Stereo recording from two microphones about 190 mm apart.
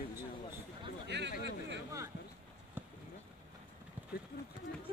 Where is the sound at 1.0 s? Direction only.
65° right (ahead or behind).